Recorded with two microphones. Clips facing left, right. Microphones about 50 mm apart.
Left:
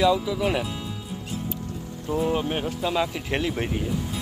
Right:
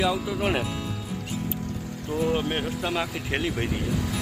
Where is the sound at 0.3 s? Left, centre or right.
Right.